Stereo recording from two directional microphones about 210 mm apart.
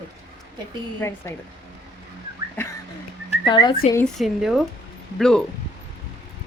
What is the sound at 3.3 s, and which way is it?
Speech, 20° left (ahead or behind).